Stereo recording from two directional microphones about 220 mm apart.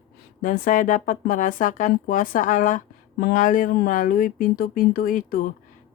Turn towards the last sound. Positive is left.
turn(degrees=40)  # may be behind; listen again after turning